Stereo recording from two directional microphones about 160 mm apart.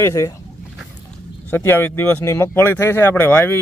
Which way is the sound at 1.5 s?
15° left (ahead or behind).